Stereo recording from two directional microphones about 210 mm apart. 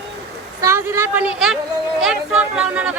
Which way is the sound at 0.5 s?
10° right (ahead or behind).